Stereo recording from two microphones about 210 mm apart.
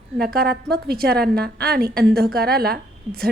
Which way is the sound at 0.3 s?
45° right (ahead or behind).